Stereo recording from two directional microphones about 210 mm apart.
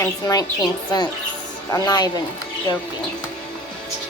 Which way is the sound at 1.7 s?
20° left (ahead or behind).